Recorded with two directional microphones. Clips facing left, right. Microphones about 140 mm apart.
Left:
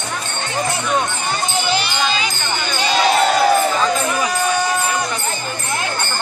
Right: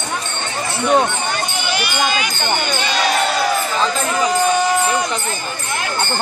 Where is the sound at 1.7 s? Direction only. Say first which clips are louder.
Right 2 dB; 30° left (ahead or behind).